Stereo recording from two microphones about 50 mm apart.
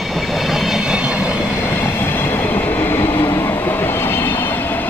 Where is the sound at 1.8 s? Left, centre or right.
Left.